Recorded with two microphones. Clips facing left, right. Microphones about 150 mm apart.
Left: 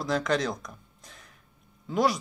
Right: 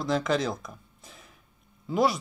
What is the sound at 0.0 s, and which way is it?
Speech, centre (ahead or behind).